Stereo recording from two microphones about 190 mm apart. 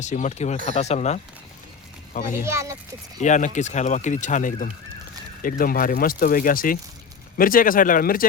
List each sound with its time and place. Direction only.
0.0 s speech: 40° left (ahead or behind)
2.4 s speech: 15° right (ahead or behind)
3.2 s speech: 40° left (ahead or behind)